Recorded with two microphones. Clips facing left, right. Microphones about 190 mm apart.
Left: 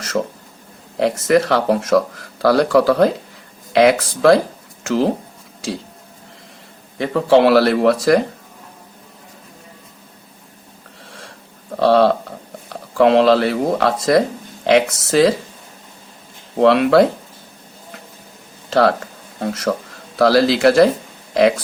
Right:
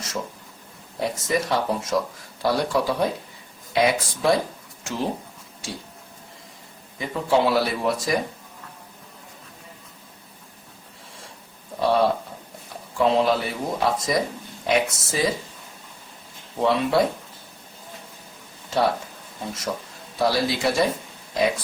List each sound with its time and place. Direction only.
0.9 s speech: 80° left
7.0 s speech: 75° left (ahead or behind)
11.8 s speech: 80° left
16.6 s speech: 80° left
18.7 s speech: 85° left
19.4 s speech: 75° left (ahead or behind)
20.1 s speech: 90° left